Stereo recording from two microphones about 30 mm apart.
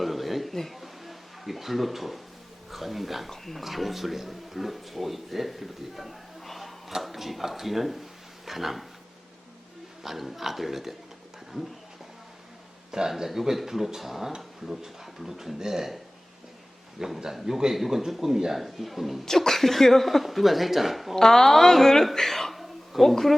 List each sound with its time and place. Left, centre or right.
0.0 s a sound: centre
2.7 s speech: centre
10.0 s speech: centre
12.9 s speech: centre
17.0 s speech: centre
18.6 s speech: centre
19.2 s a woman's voice: centre
21.2 s a woman's voice: centre